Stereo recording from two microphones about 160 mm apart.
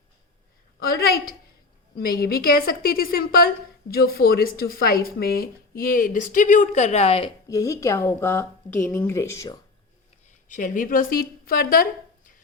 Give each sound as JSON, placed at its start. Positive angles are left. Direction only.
{"t": 0.8, "sound": "a woman's voice", "side_deg": 70}
{"t": 7.4, "sound": "speech", "side_deg": 20}
{"t": 10.2, "sound": "a woman's voice", "side_deg": 55}